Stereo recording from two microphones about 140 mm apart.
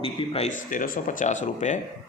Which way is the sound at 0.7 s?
70° left (ahead or behind).